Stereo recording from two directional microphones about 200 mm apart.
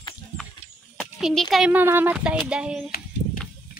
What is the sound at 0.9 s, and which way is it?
A child's voice, centre (ahead or behind).